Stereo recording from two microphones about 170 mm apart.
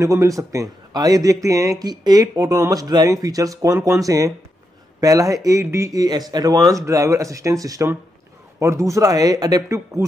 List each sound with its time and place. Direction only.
0.0 s a man's voice: 15° right (ahead or behind)